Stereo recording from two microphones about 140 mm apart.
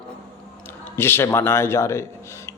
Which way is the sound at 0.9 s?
15° left (ahead or behind).